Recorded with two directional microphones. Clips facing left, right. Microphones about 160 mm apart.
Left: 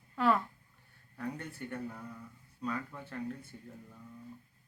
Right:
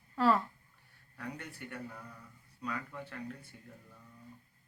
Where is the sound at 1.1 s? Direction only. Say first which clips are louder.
Left 4 dB; 25° left (ahead or behind).